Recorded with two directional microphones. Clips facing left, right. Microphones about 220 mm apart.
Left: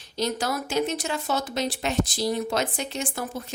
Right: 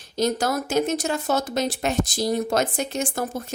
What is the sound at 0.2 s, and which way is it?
Speech, 45° right (ahead or behind).